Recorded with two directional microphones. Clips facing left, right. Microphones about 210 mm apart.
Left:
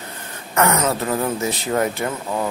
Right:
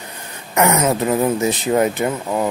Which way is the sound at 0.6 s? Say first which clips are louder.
Right 3 dB; 15° right (ahead or behind).